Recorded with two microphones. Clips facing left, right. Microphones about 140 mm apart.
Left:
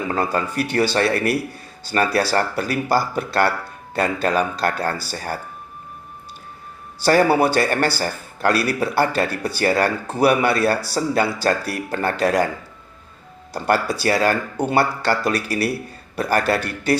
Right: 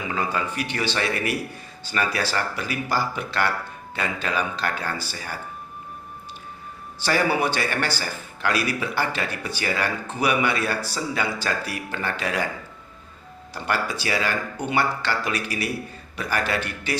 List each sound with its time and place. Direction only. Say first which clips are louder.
0.1 s speech: left 3 dB; 40° left (ahead or behind)
7.0 s speech: left 7 dB; 35° left (ahead or behind)
13.5 s speech: left 6 dB; 40° left (ahead or behind)